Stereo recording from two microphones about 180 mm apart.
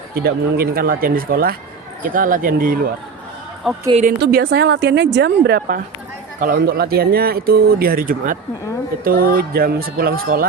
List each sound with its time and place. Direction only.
0.2 s speech: 60° right (ahead or behind)
3.6 s a woman's voice: centre (ahead or behind)
4.2 s a woman's voice: 65° right (ahead or behind)